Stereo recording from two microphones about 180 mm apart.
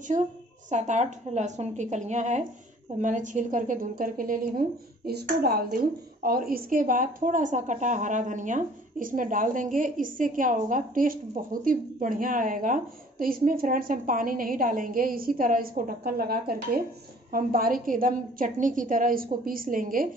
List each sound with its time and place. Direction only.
0.1 s a woman's voice: 40° right (ahead or behind)